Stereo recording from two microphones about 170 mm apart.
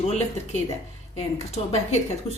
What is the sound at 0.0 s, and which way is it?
A woman's voice, 40° left (ahead or behind).